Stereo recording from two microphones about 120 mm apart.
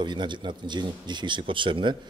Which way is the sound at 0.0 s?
40° right (ahead or behind).